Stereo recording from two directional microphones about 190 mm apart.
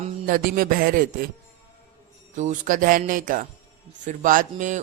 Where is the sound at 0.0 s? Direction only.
45° right (ahead or behind).